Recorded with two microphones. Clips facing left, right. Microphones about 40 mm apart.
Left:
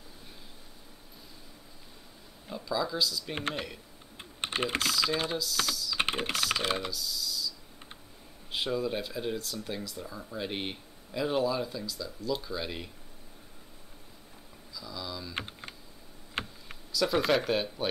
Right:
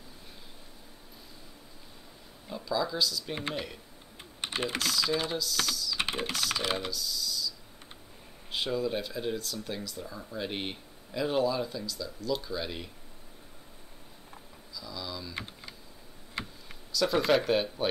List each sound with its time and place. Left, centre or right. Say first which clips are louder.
2.5 s speech: right 1 dB; centre
4.7 s speech: right 1 dB; centre
5.9 s typing: left 3 dB; left
6.3 s speech: left 1 dB; centre
14.8 s a sound: even; centre
16.4 s a sound: left 2 dB; left
16.9 s speech: right 1 dB; centre